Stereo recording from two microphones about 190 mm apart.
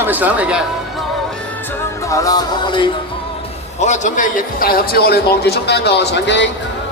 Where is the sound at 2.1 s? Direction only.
20° left (ahead or behind).